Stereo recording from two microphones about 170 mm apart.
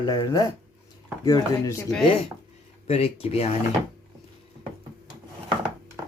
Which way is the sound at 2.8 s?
35° left (ahead or behind).